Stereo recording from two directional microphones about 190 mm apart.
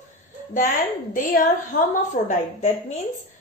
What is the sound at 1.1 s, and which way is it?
A woman's voice, 45° left (ahead or behind).